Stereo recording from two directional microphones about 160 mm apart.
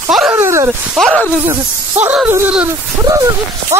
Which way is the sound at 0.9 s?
5° right (ahead or behind).